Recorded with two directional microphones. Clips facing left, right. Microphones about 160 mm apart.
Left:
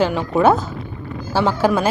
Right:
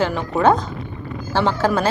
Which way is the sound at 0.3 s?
5° left (ahead or behind).